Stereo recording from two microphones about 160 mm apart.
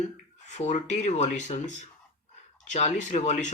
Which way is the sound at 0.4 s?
45° left (ahead or behind).